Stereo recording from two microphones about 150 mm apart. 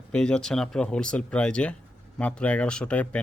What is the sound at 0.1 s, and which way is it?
Speech, 5° left (ahead or behind).